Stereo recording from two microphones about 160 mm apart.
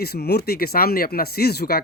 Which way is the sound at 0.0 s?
80° left.